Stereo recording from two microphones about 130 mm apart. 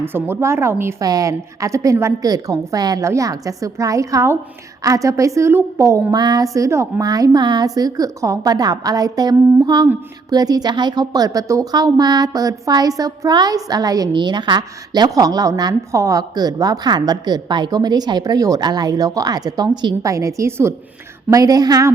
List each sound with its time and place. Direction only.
0.0 s speech: 15° right (ahead or behind)